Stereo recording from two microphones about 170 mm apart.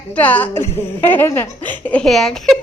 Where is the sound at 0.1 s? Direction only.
10° left (ahead or behind).